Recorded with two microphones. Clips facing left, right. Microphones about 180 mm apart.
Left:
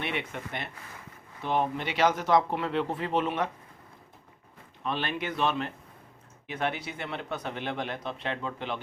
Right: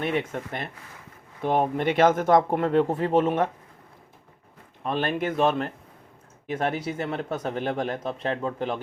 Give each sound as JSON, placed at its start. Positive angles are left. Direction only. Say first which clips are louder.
{"t": 0.0, "sound": "speech", "louder": "right 7 dB", "side_deg": -45}
{"t": 4.8, "sound": "speech", "louder": "right 6 dB", "side_deg": -45}